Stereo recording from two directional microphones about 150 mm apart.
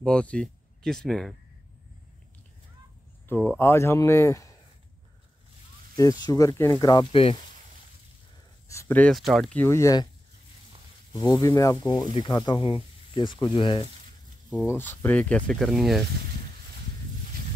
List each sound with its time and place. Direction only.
0.0 s speech: 5° left (ahead or behind)
3.4 s speech: 15° left (ahead or behind)
5.9 s speech: 25° left (ahead or behind)
7.1 s speech: 40° left (ahead or behind)
8.6 s speech: 15° left (ahead or behind)
9.1 s speech: centre (ahead or behind)
9.6 s speech: 20° left (ahead or behind)
11.1 s speech: 30° left (ahead or behind)
14.7 s speech: 15° left (ahead or behind)